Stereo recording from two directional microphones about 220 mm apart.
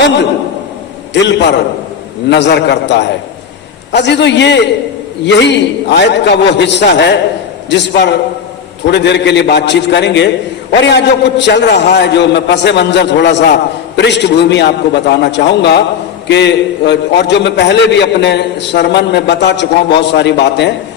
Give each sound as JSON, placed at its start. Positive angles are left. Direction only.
{"t": 1.1, "sound": "a man's voice", "side_deg": 50}